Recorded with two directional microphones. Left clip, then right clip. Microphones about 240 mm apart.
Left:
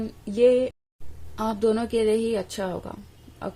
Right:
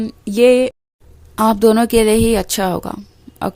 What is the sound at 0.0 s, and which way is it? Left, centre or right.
Speech, right.